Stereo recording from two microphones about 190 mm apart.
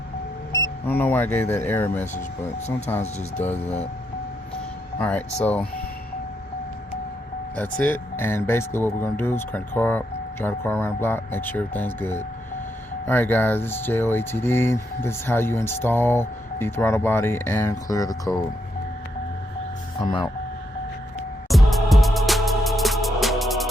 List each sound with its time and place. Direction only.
0.5 s speech: 15° left (ahead or behind)
4.9 s speech: 10° left (ahead or behind)
7.5 s speech: 10° left (ahead or behind)
20.0 s speech: 25° left (ahead or behind)
21.5 s music: centre (ahead or behind)